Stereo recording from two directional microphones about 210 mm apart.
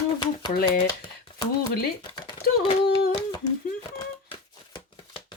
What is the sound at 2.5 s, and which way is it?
Speech, 45° left (ahead or behind).